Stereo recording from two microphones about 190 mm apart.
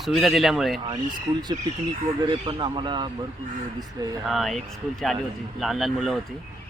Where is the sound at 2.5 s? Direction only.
25° right (ahead or behind).